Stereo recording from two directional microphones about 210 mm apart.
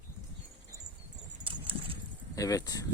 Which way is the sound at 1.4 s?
25° right (ahead or behind).